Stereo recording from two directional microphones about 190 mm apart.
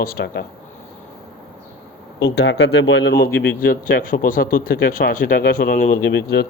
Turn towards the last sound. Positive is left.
turn(degrees=65)  # may be behind; listen again after turning